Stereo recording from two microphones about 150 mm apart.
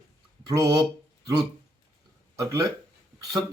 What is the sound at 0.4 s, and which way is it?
Speech, 25° right (ahead or behind).